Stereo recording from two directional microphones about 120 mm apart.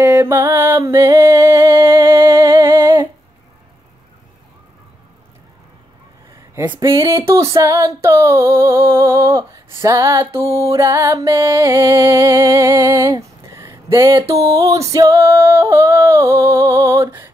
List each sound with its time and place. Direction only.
0.0 s music: 20° right (ahead or behind)
2.6 s humming: 20° right (ahead or behind)
7.0 s female singing: 25° right (ahead or behind)